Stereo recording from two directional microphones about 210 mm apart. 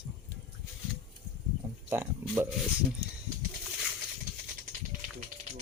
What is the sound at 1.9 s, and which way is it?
Speech, 10° right (ahead or behind).